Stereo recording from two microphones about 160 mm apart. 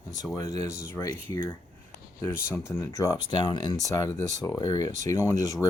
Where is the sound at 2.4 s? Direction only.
15° left (ahead or behind).